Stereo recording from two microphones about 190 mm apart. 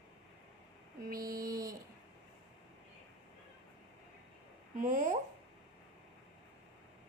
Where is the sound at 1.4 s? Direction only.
20° right (ahead or behind).